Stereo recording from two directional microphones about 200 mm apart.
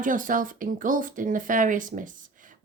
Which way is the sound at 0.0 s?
40° right (ahead or behind).